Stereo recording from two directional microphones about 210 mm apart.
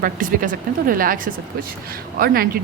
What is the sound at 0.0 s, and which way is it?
A woman's voice, 40° right (ahead or behind).